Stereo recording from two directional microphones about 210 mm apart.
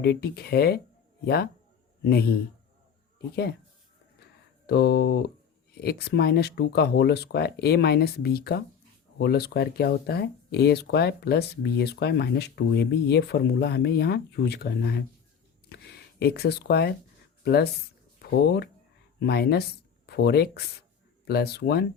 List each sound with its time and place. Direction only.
0.0 s speech: 50° left (ahead or behind)
4.6 s speech: 50° left (ahead or behind)
15.7 s a sound: 50° left (ahead or behind)
17.4 s speech: 50° left (ahead or behind)